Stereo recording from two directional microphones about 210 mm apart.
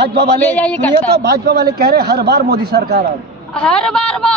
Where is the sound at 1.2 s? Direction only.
50° right (ahead or behind).